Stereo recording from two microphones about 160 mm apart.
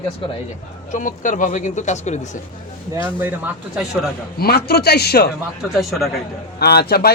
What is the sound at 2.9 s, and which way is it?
Speech, 15° right (ahead or behind).